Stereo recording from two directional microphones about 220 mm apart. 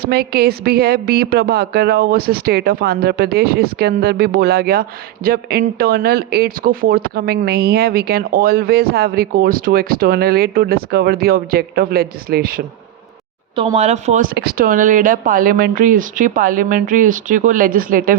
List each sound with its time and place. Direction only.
0.0 s a woman's voice: 45° right (ahead or behind)
13.6 s speech: 25° right (ahead or behind)
14.3 s speech: 40° right (ahead or behind)